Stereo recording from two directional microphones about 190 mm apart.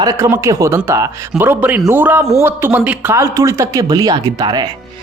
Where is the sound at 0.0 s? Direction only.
15° right (ahead or behind).